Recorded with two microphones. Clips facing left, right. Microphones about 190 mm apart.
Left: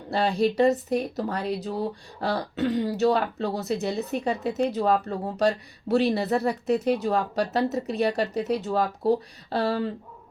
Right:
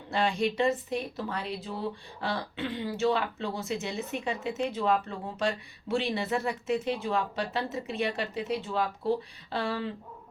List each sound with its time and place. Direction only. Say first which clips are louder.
0.1 s speech: left 5 dB; 35° left (ahead or behind)